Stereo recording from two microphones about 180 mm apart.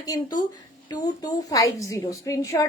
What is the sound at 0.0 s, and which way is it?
A woman's voice, 20° left (ahead or behind).